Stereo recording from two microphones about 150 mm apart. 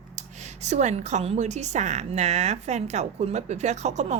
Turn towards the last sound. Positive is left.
turn(degrees=-50)  # may be behind; listen again after turning